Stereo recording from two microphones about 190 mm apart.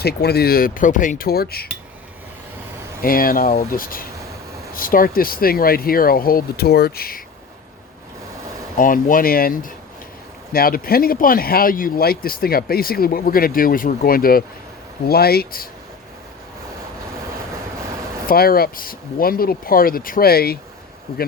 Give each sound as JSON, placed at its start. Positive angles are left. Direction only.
{"t": 0.0, "sound": "speech", "side_deg": 55}
{"t": 3.0, "sound": "speech", "side_deg": 50}
{"t": 8.8, "sound": "speech", "side_deg": 45}
{"t": 18.3, "sound": "speech", "side_deg": 50}